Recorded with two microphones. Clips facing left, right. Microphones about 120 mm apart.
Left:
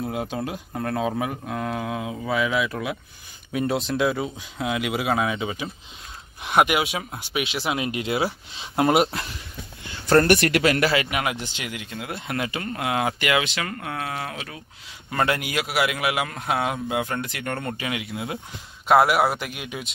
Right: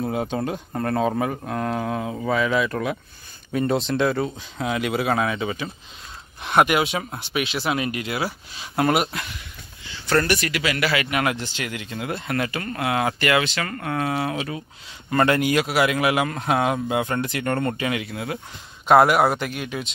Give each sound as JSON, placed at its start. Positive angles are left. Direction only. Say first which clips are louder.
{"t": 0.0, "sound": "a man's voice", "louder": "right 3 dB", "side_deg": 0}
{"t": 8.0, "sound": "speech", "louder": "left 2 dB", "side_deg": 25}
{"t": 9.8, "sound": "a sound", "louder": "left 4 dB", "side_deg": 50}
{"t": 10.2, "sound": "speech", "louder": "left 5 dB", "side_deg": 55}
{"t": 11.1, "sound": "speech", "louder": "right 3 dB", "side_deg": 15}
{"t": 12.3, "sound": "a man's voice", "louder": "even", "side_deg": 20}
{"t": 18.1, "sound": "speech", "louder": "right 1 dB", "side_deg": 20}
{"t": 18.9, "sound": "a man's voice", "louder": "right 2 dB", "side_deg": 5}